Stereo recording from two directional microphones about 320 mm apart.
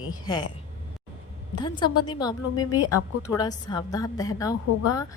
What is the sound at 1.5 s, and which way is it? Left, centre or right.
A woman's voice, centre.